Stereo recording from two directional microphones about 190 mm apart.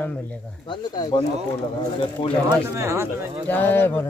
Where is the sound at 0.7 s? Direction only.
25° left (ahead or behind).